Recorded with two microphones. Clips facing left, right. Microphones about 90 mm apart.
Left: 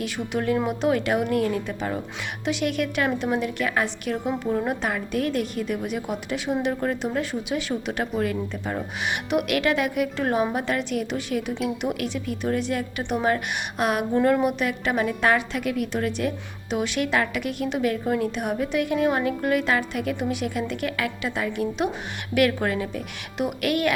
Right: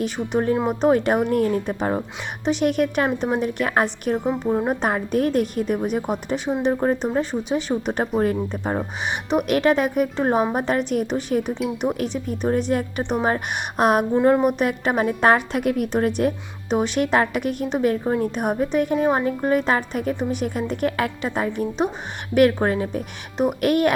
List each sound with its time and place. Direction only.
0.3 s speech: 25° right (ahead or behind)
0.7 s a woman's voice: 40° right (ahead or behind)
4.1 s a woman's voice: 35° right (ahead or behind)
4.7 s a woman's voice: 40° right (ahead or behind)
14.1 s speech: 20° right (ahead or behind)
14.4 s a woman's voice: 45° right (ahead or behind)